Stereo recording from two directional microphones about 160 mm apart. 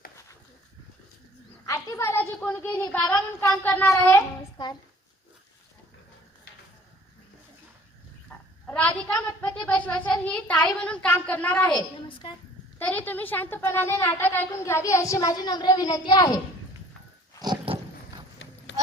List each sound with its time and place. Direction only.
1.6 s a woman's voice: 20° left (ahead or behind)
4.5 s a child's voice: 25° left (ahead or behind)
8.3 s a woman's voice: 10° left (ahead or behind)
12.0 s a woman's voice: 30° left (ahead or behind)
12.8 s a woman's voice: 10° left (ahead or behind)
17.4 s dog: 25° right (ahead or behind)
18.4 s clip-clop: 90° left